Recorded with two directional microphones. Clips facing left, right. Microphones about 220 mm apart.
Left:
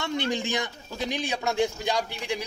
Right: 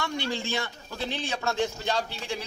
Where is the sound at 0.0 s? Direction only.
20° left (ahead or behind).